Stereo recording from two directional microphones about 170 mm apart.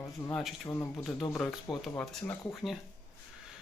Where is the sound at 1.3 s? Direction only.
Centre (ahead or behind).